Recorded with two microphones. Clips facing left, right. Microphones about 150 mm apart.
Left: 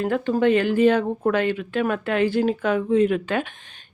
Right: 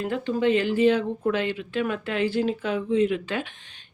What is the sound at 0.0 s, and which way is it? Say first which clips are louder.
Speech: left 4 dB; 50° left (ahead or behind).